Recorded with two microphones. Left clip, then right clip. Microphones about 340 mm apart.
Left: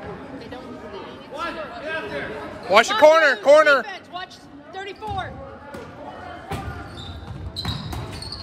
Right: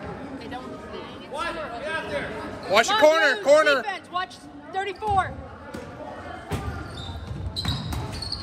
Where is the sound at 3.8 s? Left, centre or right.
Right.